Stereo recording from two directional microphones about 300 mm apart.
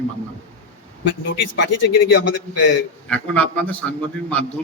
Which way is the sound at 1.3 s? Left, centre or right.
Left.